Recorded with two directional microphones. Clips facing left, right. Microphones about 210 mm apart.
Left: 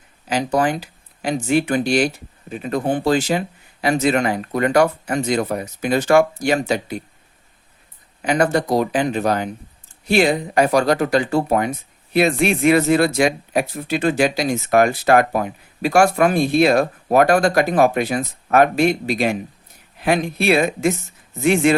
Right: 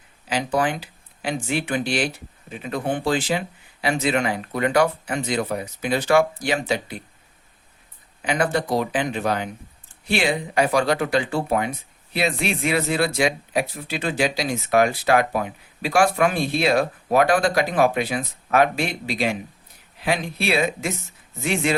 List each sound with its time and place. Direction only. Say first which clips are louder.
0.3 s speech: left 4 dB; 45° left (ahead or behind)
8.2 s speech: left 5 dB; 45° left (ahead or behind)